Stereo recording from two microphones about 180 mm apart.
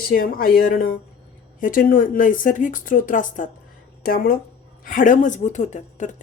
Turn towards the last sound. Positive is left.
turn(degrees=40)  # may be behind; listen again after turning